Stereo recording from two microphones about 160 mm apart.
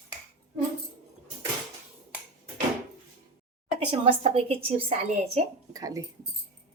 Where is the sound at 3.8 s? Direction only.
35° right (ahead or behind).